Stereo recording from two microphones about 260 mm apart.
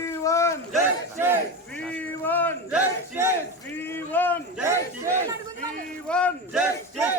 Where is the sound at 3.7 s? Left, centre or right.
Centre.